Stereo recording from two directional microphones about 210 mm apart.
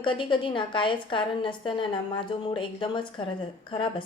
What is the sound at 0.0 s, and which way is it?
A woman's voice, 25° left (ahead or behind).